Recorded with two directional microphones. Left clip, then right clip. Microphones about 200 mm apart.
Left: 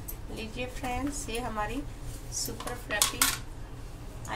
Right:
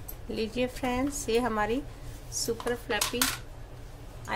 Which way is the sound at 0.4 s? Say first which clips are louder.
Right 7 dB; 45° right (ahead or behind).